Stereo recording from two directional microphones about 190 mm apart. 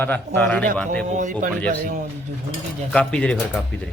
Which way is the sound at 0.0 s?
10° left (ahead or behind).